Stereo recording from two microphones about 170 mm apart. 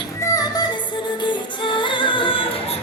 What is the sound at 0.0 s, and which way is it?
Music, 20° left (ahead or behind).